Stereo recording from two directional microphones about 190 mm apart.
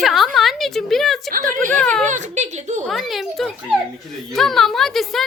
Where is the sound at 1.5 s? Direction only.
45° right (ahead or behind).